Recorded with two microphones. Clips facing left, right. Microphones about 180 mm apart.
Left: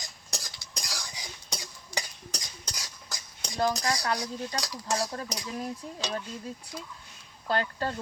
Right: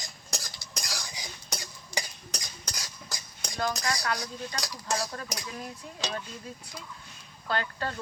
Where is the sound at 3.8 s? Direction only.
25° left (ahead or behind).